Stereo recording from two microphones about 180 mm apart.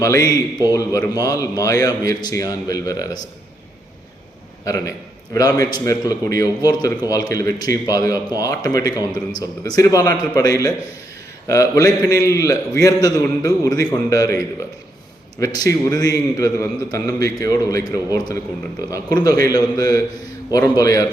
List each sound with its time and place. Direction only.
0.0 s a man's voice: 20° left (ahead or behind)
4.6 s a man's voice: 20° left (ahead or behind)
15.9 s a man's voice: 20° left (ahead or behind)